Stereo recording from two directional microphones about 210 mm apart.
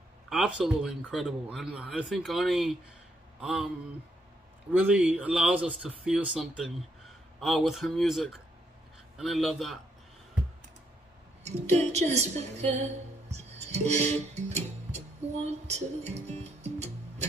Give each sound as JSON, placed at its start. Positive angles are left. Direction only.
{"t": 0.3, "sound": "a man's voice", "side_deg": 0}
{"t": 4.7, "sound": "a man's voice", "side_deg": -5}
{"t": 11.4, "sound": "a woman's voice", "side_deg": -30}
{"t": 15.7, "sound": "speech", "side_deg": -30}